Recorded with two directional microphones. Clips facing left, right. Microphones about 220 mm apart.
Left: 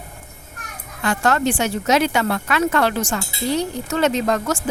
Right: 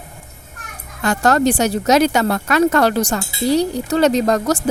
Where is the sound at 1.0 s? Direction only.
40° right (ahead or behind).